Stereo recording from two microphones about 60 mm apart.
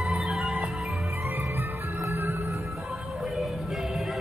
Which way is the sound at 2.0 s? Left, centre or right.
Right.